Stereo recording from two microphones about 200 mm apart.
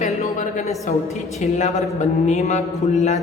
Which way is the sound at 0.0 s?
40° left (ahead or behind).